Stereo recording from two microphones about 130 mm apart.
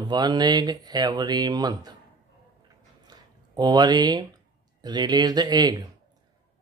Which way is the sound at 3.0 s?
30° right (ahead or behind).